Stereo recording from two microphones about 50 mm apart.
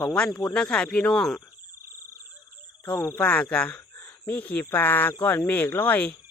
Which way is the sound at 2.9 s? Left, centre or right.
Left.